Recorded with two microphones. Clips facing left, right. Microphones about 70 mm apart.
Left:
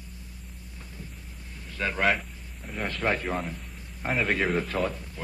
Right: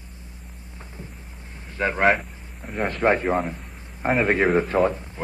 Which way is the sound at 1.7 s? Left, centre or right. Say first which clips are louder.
Right 5 dB; right.